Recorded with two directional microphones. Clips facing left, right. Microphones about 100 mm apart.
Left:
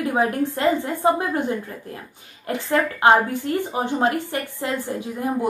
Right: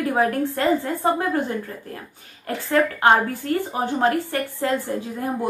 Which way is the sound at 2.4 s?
20° left (ahead or behind).